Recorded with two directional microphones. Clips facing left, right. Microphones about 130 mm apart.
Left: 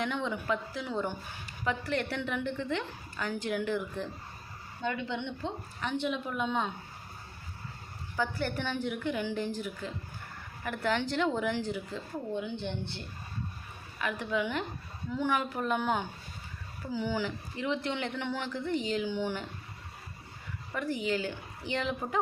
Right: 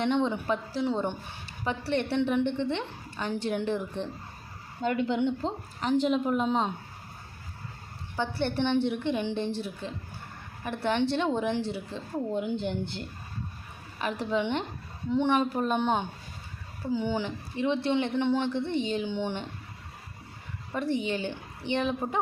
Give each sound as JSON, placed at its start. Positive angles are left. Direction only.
{"t": 0.0, "sound": "speech", "side_deg": -25}
{"t": 4.8, "sound": "a woman's voice", "side_deg": -40}
{"t": 8.1, "sound": "a woman's voice", "side_deg": -25}
{"t": 14.0, "sound": "speech", "side_deg": -30}
{"t": 20.7, "sound": "speech", "side_deg": -25}